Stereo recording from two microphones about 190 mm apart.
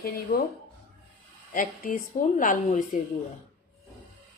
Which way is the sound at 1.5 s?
45° left (ahead or behind).